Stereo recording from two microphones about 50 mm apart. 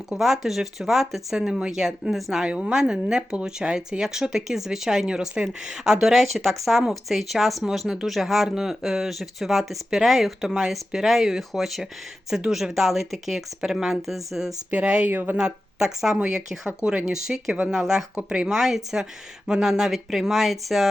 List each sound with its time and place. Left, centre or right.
0.2 s speech: centre
1.5 s speech: centre
2.5 s speech: centre
14.7 s speech: right
15.1 s speech: right
15.4 s speech: centre